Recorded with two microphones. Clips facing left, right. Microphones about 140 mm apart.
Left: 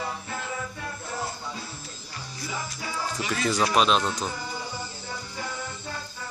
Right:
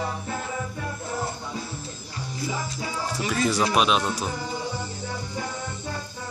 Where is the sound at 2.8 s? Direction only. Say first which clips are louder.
Right 2 dB; 35° right (ahead or behind).